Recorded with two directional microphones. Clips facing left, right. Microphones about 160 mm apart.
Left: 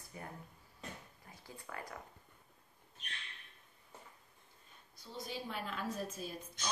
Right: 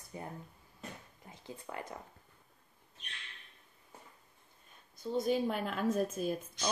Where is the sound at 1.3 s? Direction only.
20° right (ahead or behind).